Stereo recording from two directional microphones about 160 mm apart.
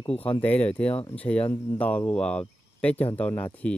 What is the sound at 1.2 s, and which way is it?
Speech, 10° left (ahead or behind).